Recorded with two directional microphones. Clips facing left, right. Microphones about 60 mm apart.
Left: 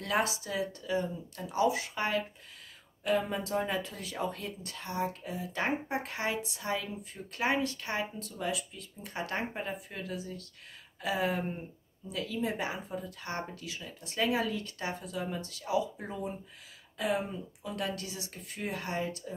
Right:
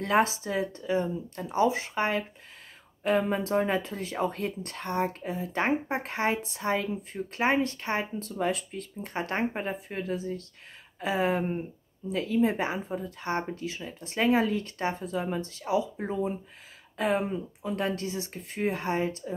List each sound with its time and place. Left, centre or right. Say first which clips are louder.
0.0 s speech: right 6 dB; right